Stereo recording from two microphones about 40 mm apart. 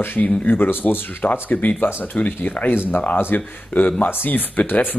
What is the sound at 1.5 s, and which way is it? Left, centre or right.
Speech, left.